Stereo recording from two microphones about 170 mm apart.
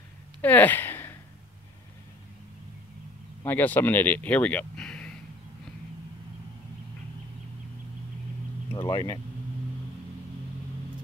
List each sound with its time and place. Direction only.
0.4 s a sound: 10° left (ahead or behind)
3.4 s speech: 10° left (ahead or behind)
8.7 s vehicle: 25° left (ahead or behind)